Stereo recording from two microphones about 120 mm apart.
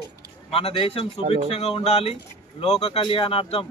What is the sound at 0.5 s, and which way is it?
Speech, 50° left (ahead or behind).